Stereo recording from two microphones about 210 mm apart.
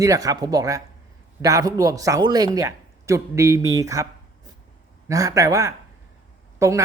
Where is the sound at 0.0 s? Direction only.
15° right (ahead or behind).